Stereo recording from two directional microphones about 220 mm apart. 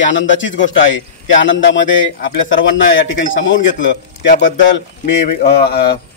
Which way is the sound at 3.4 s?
55° left (ahead or behind).